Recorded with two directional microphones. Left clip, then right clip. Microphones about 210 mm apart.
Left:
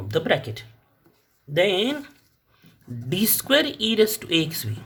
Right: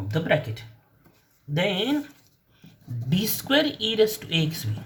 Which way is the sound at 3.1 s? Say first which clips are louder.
Left 3 dB; 50° left (ahead or behind).